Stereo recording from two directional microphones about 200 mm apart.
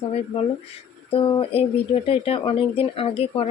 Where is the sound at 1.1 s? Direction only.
30° left (ahead or behind).